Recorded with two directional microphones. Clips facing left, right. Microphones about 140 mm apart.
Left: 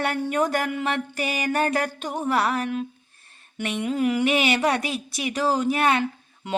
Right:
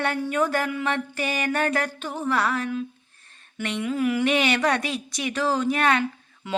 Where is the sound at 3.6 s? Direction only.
15° left (ahead or behind).